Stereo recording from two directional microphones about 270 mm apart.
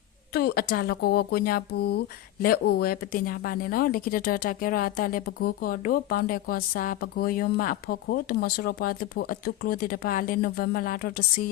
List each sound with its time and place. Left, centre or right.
0.3 s speech: left